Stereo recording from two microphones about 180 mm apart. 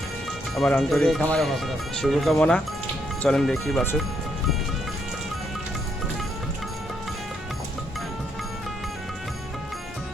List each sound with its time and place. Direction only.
0.5 s speech: centre (ahead or behind)